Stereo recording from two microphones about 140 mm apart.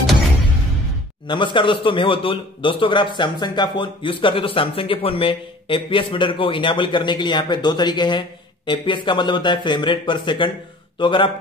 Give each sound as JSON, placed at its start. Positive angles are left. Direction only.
{"t": 1.2, "sound": "speech", "side_deg": 35}